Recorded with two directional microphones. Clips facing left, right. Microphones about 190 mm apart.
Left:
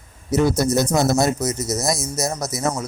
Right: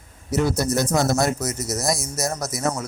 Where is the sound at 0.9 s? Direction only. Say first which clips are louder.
Left 2 dB; 20° left (ahead or behind).